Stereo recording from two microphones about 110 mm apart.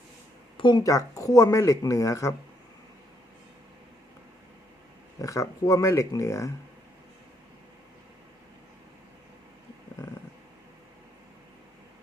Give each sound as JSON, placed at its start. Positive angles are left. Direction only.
{"t": 0.5, "sound": "a sound", "side_deg": 45}
{"t": 0.8, "sound": "speech", "side_deg": 30}
{"t": 5.2, "sound": "speech", "side_deg": 30}